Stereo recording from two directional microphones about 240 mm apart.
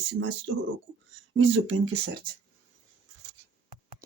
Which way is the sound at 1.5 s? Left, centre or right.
Right.